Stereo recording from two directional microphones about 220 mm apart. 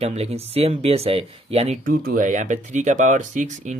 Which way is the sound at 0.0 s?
30° right (ahead or behind).